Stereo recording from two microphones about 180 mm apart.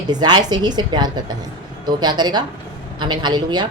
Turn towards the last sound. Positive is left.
turn(degrees=-25)  # may be behind; listen again after turning